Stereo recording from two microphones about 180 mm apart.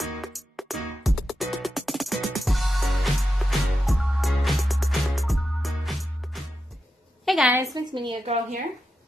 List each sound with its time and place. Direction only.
0.0 s music: centre (ahead or behind)
7.2 s a sound: 5° right (ahead or behind)
7.7 s a woman's voice: 25° right (ahead or behind)